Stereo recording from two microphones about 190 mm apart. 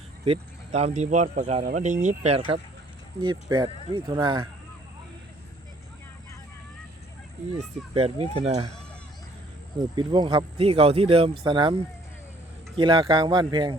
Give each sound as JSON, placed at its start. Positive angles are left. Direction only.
{"t": 0.3, "sound": "speech", "side_deg": -35}
{"t": 3.2, "sound": "speech", "side_deg": -25}
{"t": 7.9, "sound": "speech", "side_deg": -30}
{"t": 9.9, "sound": "speech", "side_deg": -25}
{"t": 12.7, "sound": "speech", "side_deg": -25}